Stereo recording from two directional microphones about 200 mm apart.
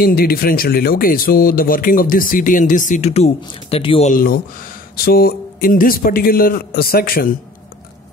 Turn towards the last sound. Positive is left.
turn(degrees=45)  # may be behind; listen again after turning